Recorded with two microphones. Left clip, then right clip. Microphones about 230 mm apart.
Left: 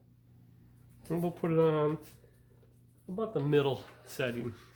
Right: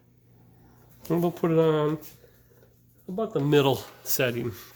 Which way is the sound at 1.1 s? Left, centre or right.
Right.